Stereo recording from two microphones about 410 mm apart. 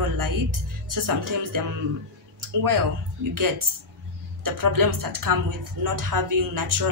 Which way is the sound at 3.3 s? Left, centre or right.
Right.